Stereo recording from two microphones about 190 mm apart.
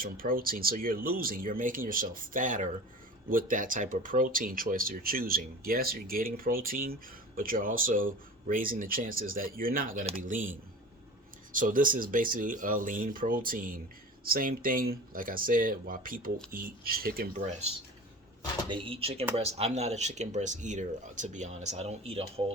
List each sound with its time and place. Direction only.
0.0 s speech: 50° right (ahead or behind)
11.5 s speech: 45° right (ahead or behind)
18.7 s speech: 30° right (ahead or behind)